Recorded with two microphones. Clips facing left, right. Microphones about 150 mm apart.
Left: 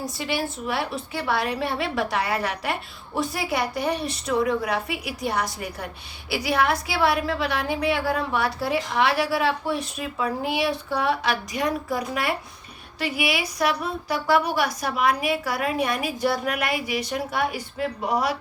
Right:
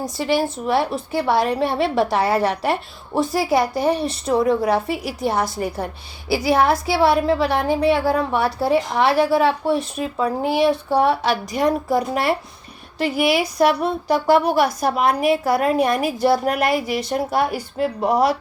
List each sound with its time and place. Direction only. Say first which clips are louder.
0.2 s a woman's voice: right 9 dB; 45° right (ahead or behind)
2.0 s a woman's voice: right 8 dB; 35° right (ahead or behind)
7.5 s a woman's voice: right 7 dB; 45° right (ahead or behind)
7.8 s speech: right 5 dB; 30° right (ahead or behind); by 18.3 s 45° right (ahead or behind)